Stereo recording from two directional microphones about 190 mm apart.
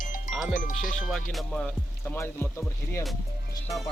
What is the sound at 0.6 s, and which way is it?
Speech, 45° left (ahead or behind).